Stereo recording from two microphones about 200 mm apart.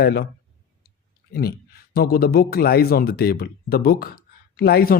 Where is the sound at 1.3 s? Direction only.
50° left (ahead or behind).